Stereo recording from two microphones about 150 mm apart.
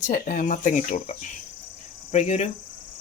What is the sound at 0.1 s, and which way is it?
Speech, 65° left (ahead or behind).